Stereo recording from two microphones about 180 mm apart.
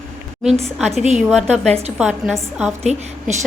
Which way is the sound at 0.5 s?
35° right (ahead or behind).